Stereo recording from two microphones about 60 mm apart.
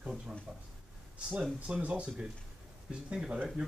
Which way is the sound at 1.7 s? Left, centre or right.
Centre.